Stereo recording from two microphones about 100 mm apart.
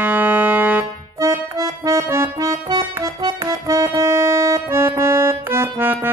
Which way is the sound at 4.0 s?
30° right (ahead or behind).